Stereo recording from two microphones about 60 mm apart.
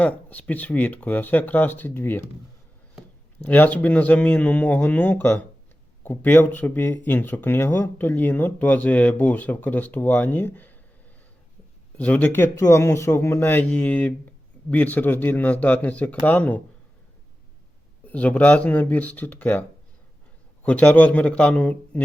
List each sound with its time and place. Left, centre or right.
0.0 s speech: left
3.4 s speech: left
8.0 s speech: left
11.9 s speech: left
12.3 s speech: left
12.6 s speech: left
13.7 s speech: left
18.0 s speech: left